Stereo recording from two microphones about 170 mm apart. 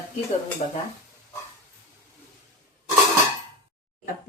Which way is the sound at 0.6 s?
40° left (ahead or behind).